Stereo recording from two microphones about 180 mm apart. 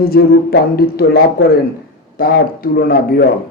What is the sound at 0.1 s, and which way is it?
A man's voice, 70° left (ahead or behind).